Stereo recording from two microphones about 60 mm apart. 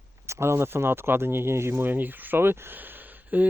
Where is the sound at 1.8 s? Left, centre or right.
Right.